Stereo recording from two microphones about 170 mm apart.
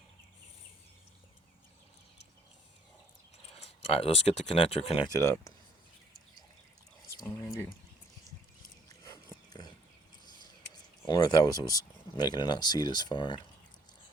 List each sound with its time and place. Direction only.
3.9 s speech: 35° left (ahead or behind)
5.2 s speech: 15° left (ahead or behind)
7.2 s a sound: 15° left (ahead or behind)
8.9 s dog: 20° left (ahead or behind)
10.2 s a sound: 25° left (ahead or behind)
11.0 s speech: 25° left (ahead or behind)